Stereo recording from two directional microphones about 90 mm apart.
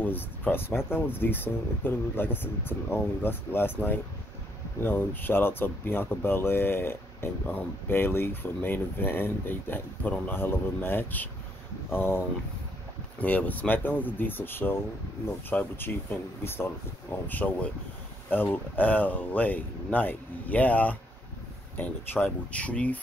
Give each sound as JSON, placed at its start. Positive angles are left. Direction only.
{"t": 0.0, "sound": "speech", "side_deg": 20}